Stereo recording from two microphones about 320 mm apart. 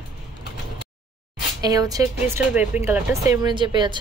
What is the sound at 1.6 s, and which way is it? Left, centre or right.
Speech, centre.